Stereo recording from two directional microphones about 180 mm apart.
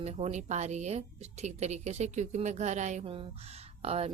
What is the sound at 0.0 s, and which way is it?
A woman's voice, 35° right (ahead or behind).